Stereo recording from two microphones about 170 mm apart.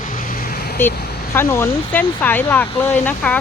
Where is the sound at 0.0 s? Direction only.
55° left (ahead or behind).